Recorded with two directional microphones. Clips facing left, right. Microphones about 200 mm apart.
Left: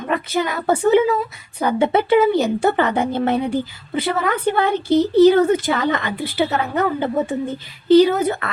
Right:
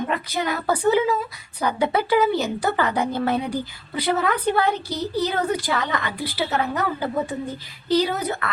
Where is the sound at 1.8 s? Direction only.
25° left (ahead or behind).